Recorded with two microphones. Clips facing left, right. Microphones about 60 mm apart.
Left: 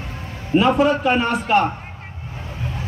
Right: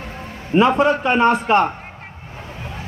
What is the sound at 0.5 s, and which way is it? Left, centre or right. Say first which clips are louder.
Speech: right 1 dB; right.